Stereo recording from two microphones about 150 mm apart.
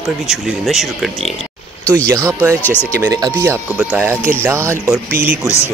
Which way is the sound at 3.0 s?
25° right (ahead or behind).